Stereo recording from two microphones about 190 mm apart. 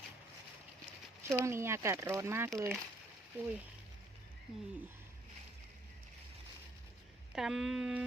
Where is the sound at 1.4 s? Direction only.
15° right (ahead or behind).